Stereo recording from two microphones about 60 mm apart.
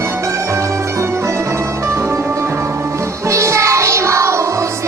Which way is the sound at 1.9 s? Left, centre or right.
Right.